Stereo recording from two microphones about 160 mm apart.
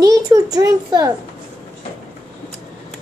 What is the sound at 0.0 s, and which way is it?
A child's voice, 25° right (ahead or behind).